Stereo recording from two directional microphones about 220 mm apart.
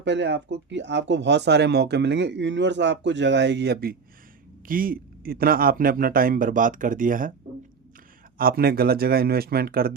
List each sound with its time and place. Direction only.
0.0 s a man's voice: 50° right (ahead or behind); by 7.3 s 35° right (ahead or behind)
8.4 s speech: 45° right (ahead or behind)